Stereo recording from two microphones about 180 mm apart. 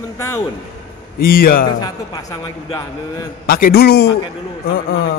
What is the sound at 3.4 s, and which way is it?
Speech, 55° left (ahead or behind).